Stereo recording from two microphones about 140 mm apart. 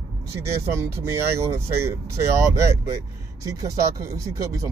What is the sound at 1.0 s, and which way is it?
Speech, 20° right (ahead or behind).